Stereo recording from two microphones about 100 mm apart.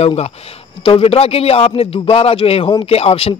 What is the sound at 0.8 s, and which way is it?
A man's voice, 70° left (ahead or behind).